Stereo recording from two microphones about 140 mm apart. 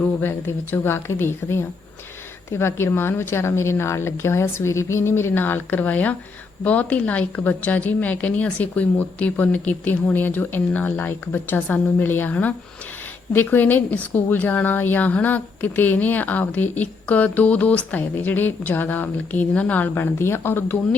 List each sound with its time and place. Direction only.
0.0 s a woman's voice: 15° left (ahead or behind)